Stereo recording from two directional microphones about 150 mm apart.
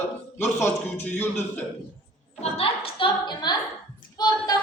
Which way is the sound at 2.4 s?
40° left (ahead or behind).